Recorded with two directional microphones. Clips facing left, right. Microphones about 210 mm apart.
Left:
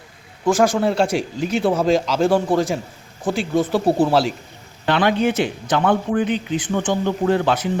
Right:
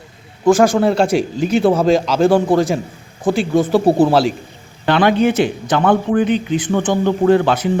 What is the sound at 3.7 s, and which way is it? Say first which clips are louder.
A man's voice: right 5 dB; 55° right (ahead or behind).